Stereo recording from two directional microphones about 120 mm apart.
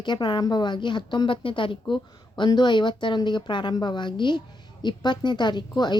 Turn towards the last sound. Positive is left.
turn(degrees=35)  # may be behind; listen again after turning